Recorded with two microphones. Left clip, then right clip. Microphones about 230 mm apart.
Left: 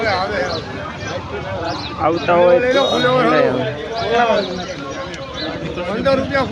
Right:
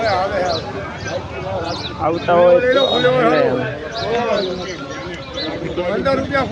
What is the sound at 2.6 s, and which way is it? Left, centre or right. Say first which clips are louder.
Speech: right 1 dB; left.